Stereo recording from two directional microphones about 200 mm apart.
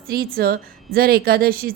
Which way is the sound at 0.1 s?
50° right (ahead or behind).